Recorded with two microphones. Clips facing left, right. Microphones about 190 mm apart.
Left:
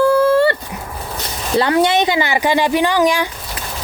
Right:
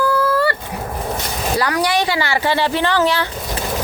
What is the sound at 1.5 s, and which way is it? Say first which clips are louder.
Speech: left 5 dB; 25° left (ahead or behind).